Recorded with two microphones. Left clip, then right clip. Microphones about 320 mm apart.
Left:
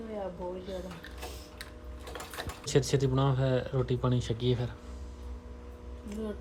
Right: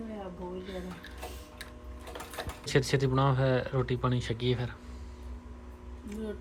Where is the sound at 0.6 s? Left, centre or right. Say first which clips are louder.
Left 2 dB; centre.